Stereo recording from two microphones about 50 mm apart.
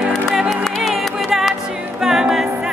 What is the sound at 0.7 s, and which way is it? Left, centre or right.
Music, centre.